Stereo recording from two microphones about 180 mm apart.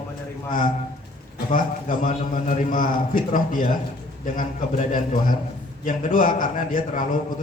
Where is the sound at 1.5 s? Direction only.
50° left (ahead or behind).